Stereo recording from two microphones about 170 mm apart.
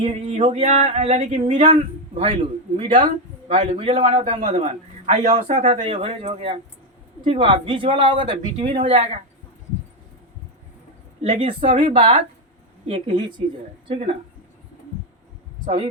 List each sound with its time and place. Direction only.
0.0 s a man's voice: 40° right (ahead or behind)
11.2 s a man's voice: 35° right (ahead or behind)